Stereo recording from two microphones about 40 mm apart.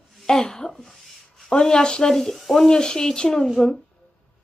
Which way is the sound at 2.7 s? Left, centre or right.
Centre.